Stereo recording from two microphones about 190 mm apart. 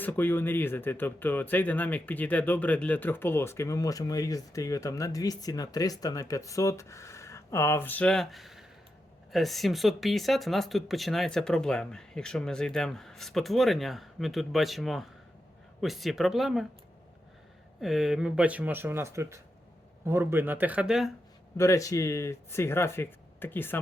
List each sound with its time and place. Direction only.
0.0 s speech: 10° left (ahead or behind)
17.7 s speech: centre (ahead or behind)
21.6 s speech: 15° left (ahead or behind)